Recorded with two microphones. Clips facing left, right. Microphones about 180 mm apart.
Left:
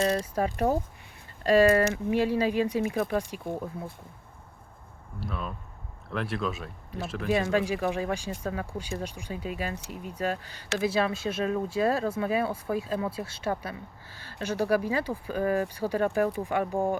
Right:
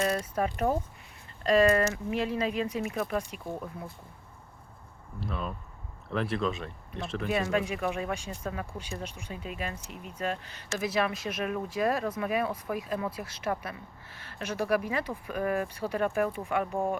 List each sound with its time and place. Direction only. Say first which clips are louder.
0.0 s speech: left 2 dB; 30° left (ahead or behind)
5.2 s speech: even; centre (ahead or behind)
7.3 s speech: left 4 dB; 30° left (ahead or behind)